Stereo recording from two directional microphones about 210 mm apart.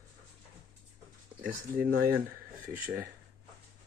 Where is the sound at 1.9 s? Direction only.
50° right (ahead or behind).